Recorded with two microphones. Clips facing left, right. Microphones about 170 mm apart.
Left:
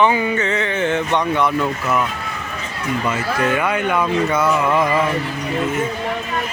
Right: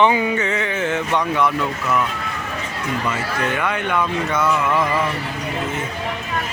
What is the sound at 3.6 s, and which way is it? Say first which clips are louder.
Speech: left 2 dB; 10° left (ahead or behind).